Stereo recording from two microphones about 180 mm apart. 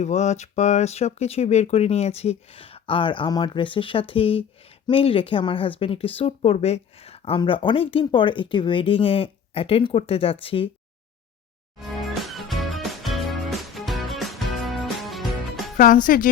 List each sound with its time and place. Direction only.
0.0 s speech: 40° left (ahead or behind)
11.8 s music: centre (ahead or behind)
16.0 s a woman's voice: 50° left (ahead or behind)